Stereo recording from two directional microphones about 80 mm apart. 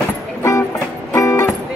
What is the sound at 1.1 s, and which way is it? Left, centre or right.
Music, left.